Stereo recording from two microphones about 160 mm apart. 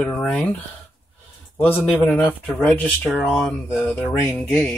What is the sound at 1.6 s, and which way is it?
Speech, 10° left (ahead or behind).